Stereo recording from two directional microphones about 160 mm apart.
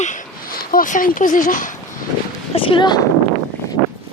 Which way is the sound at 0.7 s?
60° left (ahead or behind).